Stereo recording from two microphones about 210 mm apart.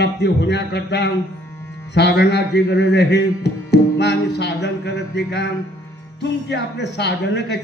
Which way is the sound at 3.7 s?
55° left (ahead or behind).